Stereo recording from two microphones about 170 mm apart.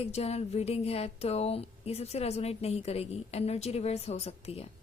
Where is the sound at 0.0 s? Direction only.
40° left (ahead or behind).